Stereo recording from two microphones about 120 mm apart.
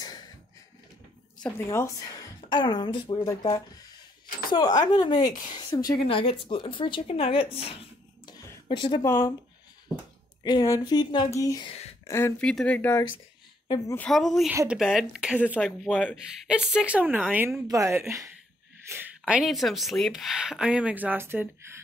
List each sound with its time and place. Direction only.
1.7 s speech: 20° left (ahead or behind)
2.5 s speech: 40° left (ahead or behind)
6.0 s speech: 50° left (ahead or behind)
8.6 s a woman's voice: 40° left (ahead or behind)
9.0 s speech: 20° left (ahead or behind)
10.4 s speech: 35° left (ahead or behind)
12.4 s speech: 10° left (ahead or behind)
13.7 s a woman's voice: 30° left (ahead or behind)
14.1 s speech: centre (ahead or behind)
17.6 s speech: 25° right (ahead or behind)